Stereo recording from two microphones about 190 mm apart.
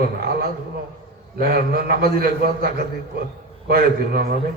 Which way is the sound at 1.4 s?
55° right (ahead or behind).